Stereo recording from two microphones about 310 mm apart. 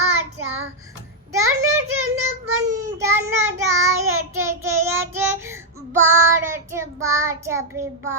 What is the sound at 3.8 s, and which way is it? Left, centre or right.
Child singing, right.